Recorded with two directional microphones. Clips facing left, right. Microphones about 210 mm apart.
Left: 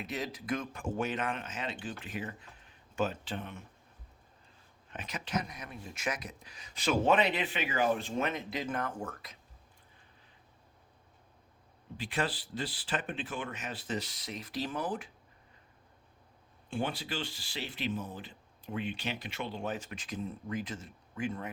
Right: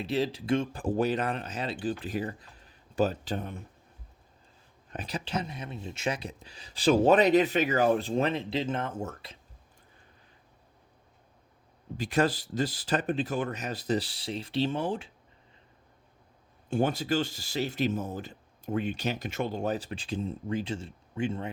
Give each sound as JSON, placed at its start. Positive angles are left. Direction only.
{"t": 0.0, "sound": "speech", "side_deg": -30}
{"t": 4.9, "sound": "speech", "side_deg": -35}
{"t": 11.9, "sound": "speech", "side_deg": -40}
{"t": 16.6, "sound": "speech", "side_deg": -40}